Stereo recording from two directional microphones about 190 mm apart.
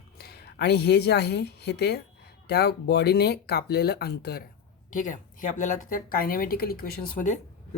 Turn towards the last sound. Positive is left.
turn(degrees=45)  # may be behind; listen again after turning